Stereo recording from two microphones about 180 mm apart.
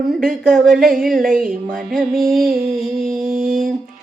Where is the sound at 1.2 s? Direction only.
50° right (ahead or behind).